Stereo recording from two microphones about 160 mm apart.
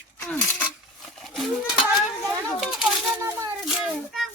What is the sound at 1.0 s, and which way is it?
Goat, centre (ahead or behind).